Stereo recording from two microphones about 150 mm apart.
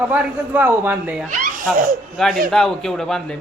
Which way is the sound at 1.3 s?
60° right (ahead or behind).